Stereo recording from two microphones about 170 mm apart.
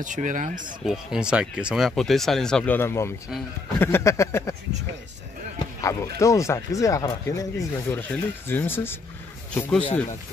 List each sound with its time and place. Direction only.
0.0 s speech: 50° right (ahead or behind)
0.8 s speech: 5° right (ahead or behind); by 4.6 s 15° left (ahead or behind)
5.8 s speech: 15° left (ahead or behind)